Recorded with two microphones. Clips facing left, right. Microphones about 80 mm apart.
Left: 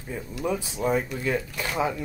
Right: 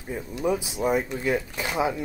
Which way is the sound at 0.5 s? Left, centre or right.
Centre.